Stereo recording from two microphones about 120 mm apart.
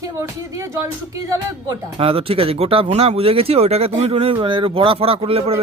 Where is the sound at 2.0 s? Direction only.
50° right (ahead or behind).